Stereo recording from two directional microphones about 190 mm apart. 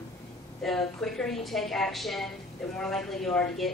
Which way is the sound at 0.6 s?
Centre (ahead or behind).